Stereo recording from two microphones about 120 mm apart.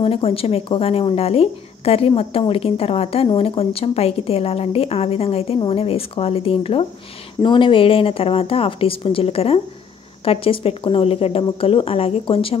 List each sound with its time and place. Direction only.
0.0 s a woman's voice: 50° left (ahead or behind)